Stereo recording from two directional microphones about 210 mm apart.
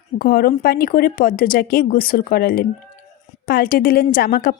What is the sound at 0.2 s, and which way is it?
A woman's voice, 45° left (ahead or behind).